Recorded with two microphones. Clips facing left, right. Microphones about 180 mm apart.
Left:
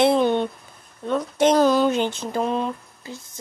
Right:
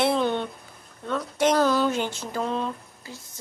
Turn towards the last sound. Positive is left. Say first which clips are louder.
# left 3 dB
turn(degrees=20)  # may be behind; listen again after turning